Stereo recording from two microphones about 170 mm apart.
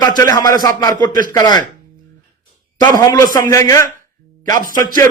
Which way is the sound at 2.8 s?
20° left (ahead or behind).